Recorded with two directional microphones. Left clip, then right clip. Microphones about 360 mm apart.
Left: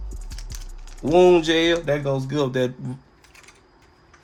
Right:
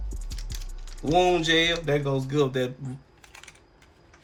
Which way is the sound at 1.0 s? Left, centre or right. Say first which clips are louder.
Left 6 dB; left.